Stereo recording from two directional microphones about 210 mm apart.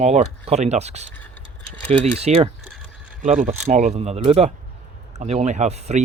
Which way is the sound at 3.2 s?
35° right (ahead or behind).